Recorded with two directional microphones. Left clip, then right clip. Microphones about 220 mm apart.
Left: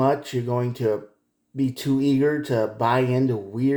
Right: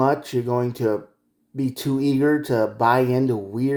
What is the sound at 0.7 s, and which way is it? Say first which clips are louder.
Speech: right 1 dB; 30° right (ahead or behind).